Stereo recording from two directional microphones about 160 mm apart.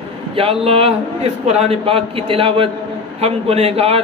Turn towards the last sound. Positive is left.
turn(degrees=-40)  # may be behind; listen again after turning